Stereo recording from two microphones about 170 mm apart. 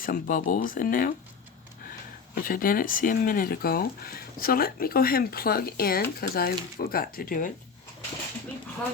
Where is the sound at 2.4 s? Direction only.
55° left (ahead or behind).